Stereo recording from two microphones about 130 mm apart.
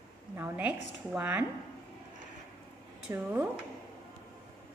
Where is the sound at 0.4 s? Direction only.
15° right (ahead or behind).